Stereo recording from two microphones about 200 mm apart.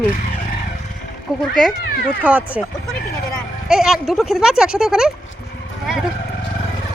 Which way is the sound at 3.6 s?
5° right (ahead or behind).